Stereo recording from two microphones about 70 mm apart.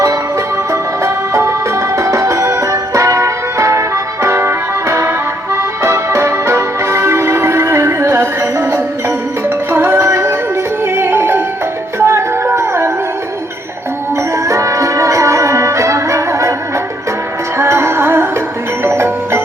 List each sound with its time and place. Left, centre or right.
0.7 s music: right
14.3 s music: right
17.6 s music: right